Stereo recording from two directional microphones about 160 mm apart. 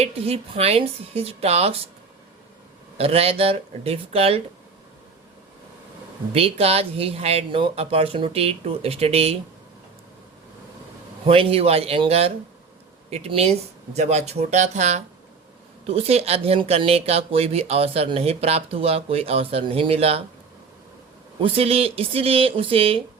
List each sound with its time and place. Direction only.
0.0 s speech: 40° right (ahead or behind)
3.0 s speech: 40° right (ahead or behind)
6.3 s speech: 40° right (ahead or behind)
11.3 s speech: 35° right (ahead or behind)
21.4 s speech: 40° right (ahead or behind)